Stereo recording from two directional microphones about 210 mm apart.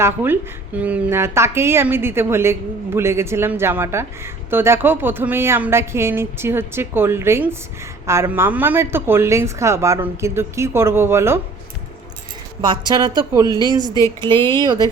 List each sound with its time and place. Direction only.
0.0 s a woman's voice: 10° right (ahead or behind)
12.9 s speech: 20° right (ahead or behind)
13.5 s a woman's voice: 20° left (ahead or behind)
14.6 s speech: 20° right (ahead or behind)